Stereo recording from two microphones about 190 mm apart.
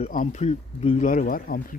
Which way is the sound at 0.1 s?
40° left (ahead or behind).